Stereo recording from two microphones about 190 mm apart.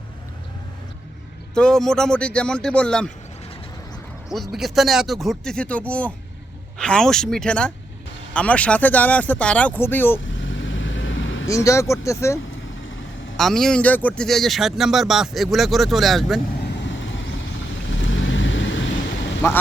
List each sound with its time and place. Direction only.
1.5 s speech: 5° left (ahead or behind)
4.3 s speech: centre (ahead or behind)
10.2 s vehicle: 80° left
11.4 s speech: 15° left (ahead or behind)
13.3 s speech: centre (ahead or behind)
16.7 s vehicle: 70° left (ahead or behind)
19.4 s speech: 15° left (ahead or behind)